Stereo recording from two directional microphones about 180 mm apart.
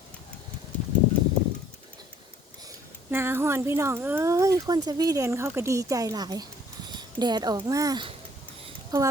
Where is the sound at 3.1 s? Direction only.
15° right (ahead or behind).